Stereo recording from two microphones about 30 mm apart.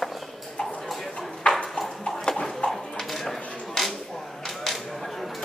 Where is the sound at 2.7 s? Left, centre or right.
Centre.